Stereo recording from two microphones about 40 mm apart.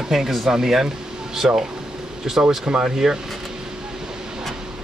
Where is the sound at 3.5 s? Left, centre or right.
Centre.